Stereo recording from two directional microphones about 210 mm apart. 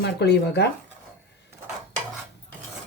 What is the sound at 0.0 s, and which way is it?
Speech, 50° left (ahead or behind).